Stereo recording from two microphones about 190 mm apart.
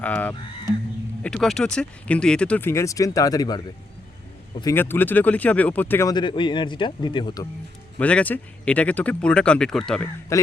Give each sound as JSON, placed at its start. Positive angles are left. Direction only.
{"t": 0.0, "sound": "speech", "side_deg": 10}
{"t": 7.9, "sound": "speech", "side_deg": 5}
{"t": 10.3, "sound": "speech", "side_deg": 15}